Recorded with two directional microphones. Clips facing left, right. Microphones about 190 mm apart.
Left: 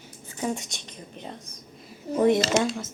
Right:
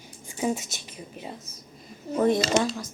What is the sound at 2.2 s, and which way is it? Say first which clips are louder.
Speech: left 1 dB; 25° left (ahead or behind).